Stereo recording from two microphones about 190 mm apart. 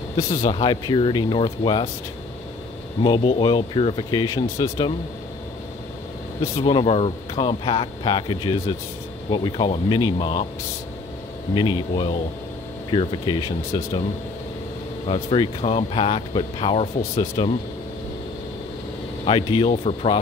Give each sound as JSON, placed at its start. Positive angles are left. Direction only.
{"t": 0.4, "sound": "speech", "side_deg": 25}
{"t": 3.0, "sound": "speech", "side_deg": 25}
{"t": 6.5, "sound": "speech", "side_deg": 25}
{"t": 11.5, "sound": "speech", "side_deg": 25}
{"t": 15.0, "sound": "speech", "side_deg": 30}
{"t": 19.2, "sound": "speech", "side_deg": 30}